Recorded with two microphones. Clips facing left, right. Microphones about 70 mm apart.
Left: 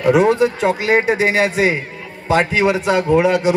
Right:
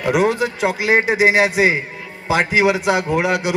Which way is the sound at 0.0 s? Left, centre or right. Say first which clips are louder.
Left 4 dB; centre.